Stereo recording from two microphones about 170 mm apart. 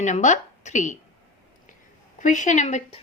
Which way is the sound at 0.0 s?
45° left (ahead or behind).